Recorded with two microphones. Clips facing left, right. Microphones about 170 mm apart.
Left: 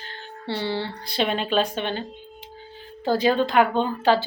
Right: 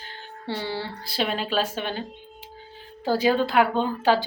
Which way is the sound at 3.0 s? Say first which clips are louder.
Left 1 dB; 10° right (ahead or behind).